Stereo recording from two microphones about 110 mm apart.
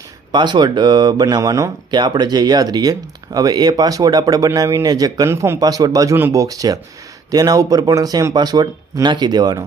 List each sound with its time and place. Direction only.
0.3 s speech: 45° right (ahead or behind)
1.9 s speech: 45° right (ahead or behind)